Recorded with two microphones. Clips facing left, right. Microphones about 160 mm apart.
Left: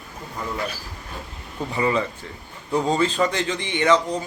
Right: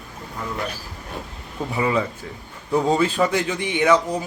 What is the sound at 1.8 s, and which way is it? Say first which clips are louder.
A man's voice: even; 5° right (ahead or behind).